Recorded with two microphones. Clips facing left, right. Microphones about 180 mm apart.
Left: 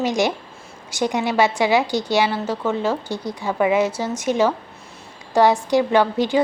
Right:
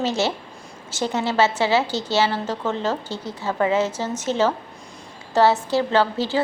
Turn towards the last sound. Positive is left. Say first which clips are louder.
# left 3 dB
turn(degrees=15)  # may be behind; listen again after turning